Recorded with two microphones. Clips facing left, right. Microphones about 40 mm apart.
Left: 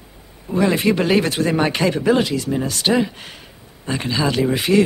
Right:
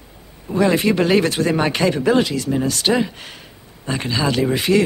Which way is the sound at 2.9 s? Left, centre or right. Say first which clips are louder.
Left 1 dB; centre.